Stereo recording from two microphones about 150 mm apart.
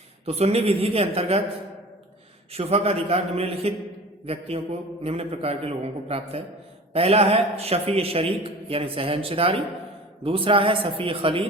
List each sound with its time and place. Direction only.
0.3 s a man's voice: 40° right (ahead or behind)
2.5 s a man's voice: 40° right (ahead or behind)